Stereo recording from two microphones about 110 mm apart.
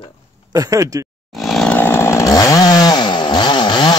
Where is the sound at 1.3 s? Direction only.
Centre (ahead or behind).